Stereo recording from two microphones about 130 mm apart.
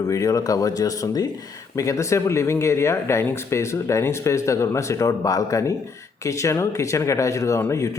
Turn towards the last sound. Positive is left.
turn(degrees=25)  # may be behind; listen again after turning